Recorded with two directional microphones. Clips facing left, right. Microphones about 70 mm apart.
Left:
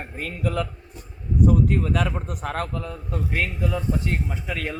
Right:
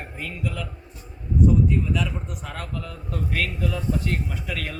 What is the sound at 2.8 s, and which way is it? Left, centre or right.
A man's voice, left.